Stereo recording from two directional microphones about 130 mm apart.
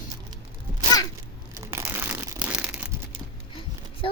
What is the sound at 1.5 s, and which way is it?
Crumpling, 20° right (ahead or behind).